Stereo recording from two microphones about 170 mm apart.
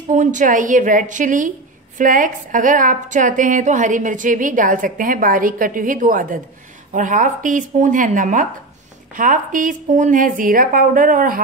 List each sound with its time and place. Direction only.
0.1 s a woman's voice: 45° right (ahead or behind)